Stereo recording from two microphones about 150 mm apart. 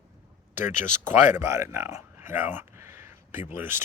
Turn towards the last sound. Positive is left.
turn(degrees=-15)  # may be behind; listen again after turning